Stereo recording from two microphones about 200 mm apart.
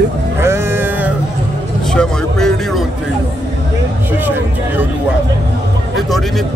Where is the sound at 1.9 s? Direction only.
5° left (ahead or behind).